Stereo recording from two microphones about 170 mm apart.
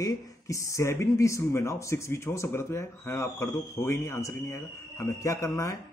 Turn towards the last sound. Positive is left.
turn(degrees=20)  # may be behind; listen again after turning